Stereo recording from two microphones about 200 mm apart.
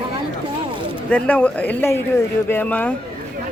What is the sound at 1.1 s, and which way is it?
Speech, 5° left (ahead or behind).